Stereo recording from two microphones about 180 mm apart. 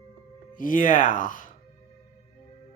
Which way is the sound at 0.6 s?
50° left (ahead or behind).